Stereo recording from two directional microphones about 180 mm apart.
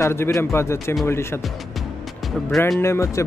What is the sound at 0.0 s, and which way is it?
A man's voice, 15° left (ahead or behind).